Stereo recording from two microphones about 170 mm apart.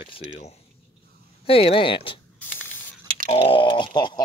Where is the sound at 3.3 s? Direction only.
30° left (ahead or behind).